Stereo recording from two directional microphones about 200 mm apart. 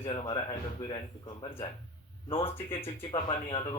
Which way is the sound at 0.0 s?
25° left (ahead or behind).